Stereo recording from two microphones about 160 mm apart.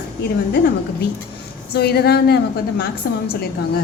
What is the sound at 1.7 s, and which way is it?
A woman's voice, 90° left.